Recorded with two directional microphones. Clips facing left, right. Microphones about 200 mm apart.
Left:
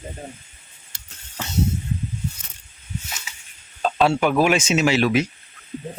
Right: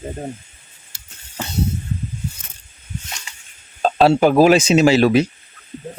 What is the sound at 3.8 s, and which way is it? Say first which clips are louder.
Speech: right 5 dB; 35° right (ahead or behind).